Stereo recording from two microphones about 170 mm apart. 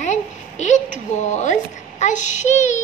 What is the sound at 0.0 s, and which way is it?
A woman's voice, 45° left (ahead or behind).